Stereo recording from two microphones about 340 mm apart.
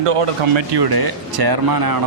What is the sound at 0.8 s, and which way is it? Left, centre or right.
Speech, right.